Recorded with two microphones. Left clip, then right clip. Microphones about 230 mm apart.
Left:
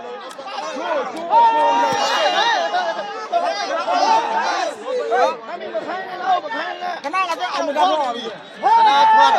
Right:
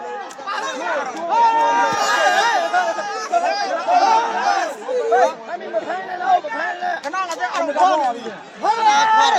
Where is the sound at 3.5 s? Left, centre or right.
Right.